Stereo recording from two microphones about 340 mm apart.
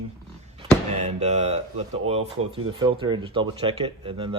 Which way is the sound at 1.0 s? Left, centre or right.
Centre.